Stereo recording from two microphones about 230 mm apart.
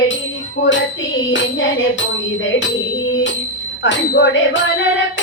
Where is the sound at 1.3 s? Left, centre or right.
Left.